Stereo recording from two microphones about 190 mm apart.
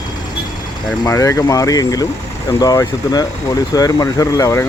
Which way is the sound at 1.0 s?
15° left (ahead or behind).